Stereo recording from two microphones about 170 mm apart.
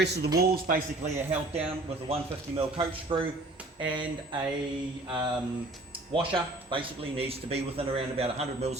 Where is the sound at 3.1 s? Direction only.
25° right (ahead or behind).